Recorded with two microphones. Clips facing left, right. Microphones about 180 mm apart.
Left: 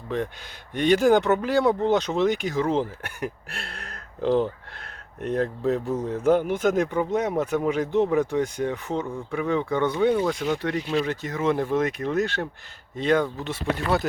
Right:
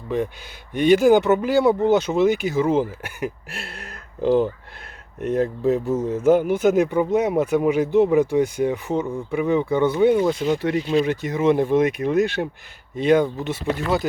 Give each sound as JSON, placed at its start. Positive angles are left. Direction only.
{"t": 0.7, "sound": "speech", "side_deg": -5}
{"t": 10.9, "sound": "speech", "side_deg": -15}
{"t": 13.5, "sound": "speech", "side_deg": 0}